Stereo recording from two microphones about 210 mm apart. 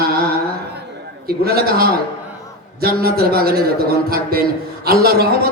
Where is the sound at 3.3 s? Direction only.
45° right (ahead or behind).